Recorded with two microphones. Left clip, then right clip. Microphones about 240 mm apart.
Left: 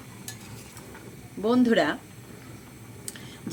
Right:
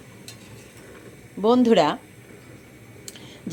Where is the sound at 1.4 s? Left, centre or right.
Centre.